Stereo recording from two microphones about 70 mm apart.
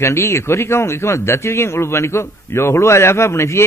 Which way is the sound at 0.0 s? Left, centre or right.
Left.